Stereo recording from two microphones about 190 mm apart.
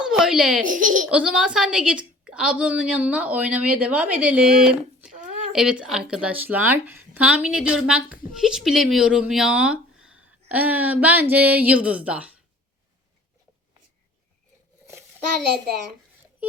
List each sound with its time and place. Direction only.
0.0 s baby laughter: centre (ahead or behind)
0.6 s speech: 45° right (ahead or behind)
1.1 s speech: 5° right (ahead or behind)